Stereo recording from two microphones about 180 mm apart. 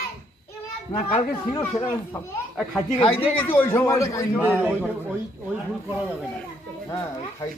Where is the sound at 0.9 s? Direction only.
30° left (ahead or behind).